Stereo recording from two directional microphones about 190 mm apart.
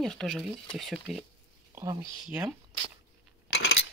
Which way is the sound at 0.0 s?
Centre (ahead or behind).